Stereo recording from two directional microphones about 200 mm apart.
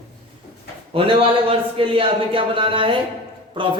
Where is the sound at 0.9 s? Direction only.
30° right (ahead or behind).